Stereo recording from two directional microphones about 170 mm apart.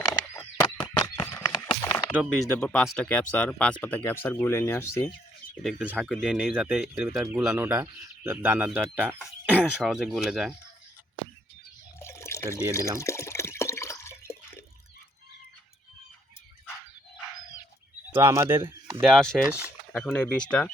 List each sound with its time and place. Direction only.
0.1 s horse: 20° left (ahead or behind)
2.5 s speech: 5° left (ahead or behind)
5.6 s speech: 5° right (ahead or behind)
11.9 s water: 15° left (ahead or behind)
13.0 s drip: 15° left (ahead or behind)
18.2 s speech: 15° right (ahead or behind)
19.0 s speech: centre (ahead or behind)